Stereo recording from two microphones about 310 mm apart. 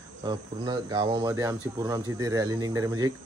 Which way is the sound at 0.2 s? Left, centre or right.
Centre.